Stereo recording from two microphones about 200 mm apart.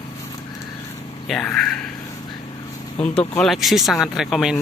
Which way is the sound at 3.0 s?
5° left (ahead or behind).